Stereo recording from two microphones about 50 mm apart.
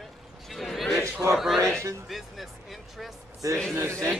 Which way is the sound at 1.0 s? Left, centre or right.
Right.